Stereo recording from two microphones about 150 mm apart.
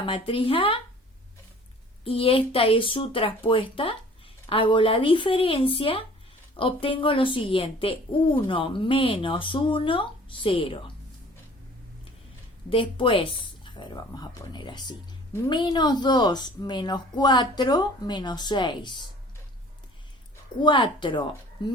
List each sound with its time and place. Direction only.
0.0 s speech: 35° left (ahead or behind)
2.0 s speech: 40° left (ahead or behind)
12.7 s a woman's voice: 35° left (ahead or behind)
20.6 s speech: 35° left (ahead or behind)